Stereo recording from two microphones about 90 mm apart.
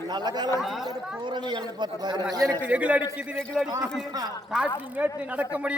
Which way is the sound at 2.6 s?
15° right (ahead or behind).